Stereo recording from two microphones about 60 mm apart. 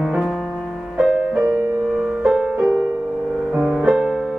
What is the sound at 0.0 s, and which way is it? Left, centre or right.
Music, centre.